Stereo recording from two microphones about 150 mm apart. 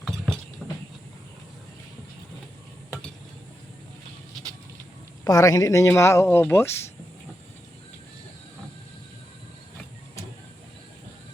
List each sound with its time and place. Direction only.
0.6 s train: centre (ahead or behind)
5.2 s speech: 25° left (ahead or behind)